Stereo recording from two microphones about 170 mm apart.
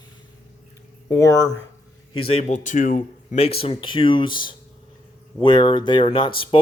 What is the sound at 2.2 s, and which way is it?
Speech, 35° left (ahead or behind).